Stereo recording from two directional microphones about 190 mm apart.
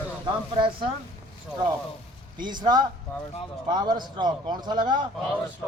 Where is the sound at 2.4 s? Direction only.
25° right (ahead or behind).